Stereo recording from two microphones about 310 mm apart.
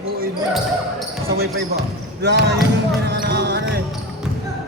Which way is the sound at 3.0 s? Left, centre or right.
Right.